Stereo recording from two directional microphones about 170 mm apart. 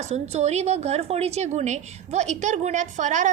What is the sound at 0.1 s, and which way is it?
A woman's voice, 40° right (ahead or behind).